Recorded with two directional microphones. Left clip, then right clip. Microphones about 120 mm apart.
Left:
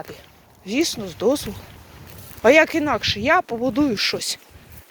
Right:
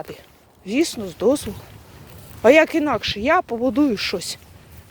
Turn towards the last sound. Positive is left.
turn(degrees=-40)  # may be behind; listen again after turning